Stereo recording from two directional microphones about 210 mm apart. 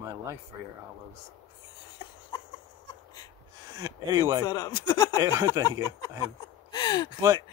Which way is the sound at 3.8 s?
15° right (ahead or behind).